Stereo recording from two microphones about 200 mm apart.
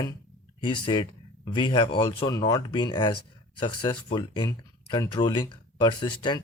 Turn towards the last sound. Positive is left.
turn(degrees=20)  # may be behind; listen again after turning